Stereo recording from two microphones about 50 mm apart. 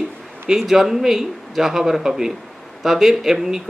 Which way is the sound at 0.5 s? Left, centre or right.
Centre.